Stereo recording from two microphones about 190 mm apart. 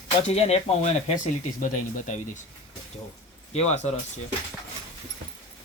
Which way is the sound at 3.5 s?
35° left (ahead or behind).